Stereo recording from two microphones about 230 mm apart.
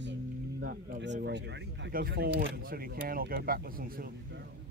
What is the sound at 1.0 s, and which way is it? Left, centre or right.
Speech, right.